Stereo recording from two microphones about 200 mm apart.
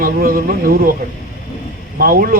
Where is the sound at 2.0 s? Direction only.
45° right (ahead or behind).